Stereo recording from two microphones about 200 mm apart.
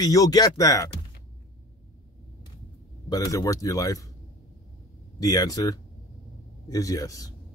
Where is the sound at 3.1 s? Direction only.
20° left (ahead or behind).